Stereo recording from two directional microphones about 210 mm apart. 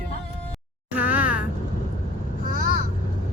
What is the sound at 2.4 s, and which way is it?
Vehicle, 40° left (ahead or behind).